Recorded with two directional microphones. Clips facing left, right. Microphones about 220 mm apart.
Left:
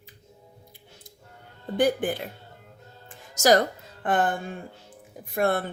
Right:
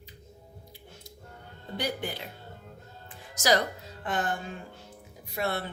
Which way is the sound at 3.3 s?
45° left (ahead or behind).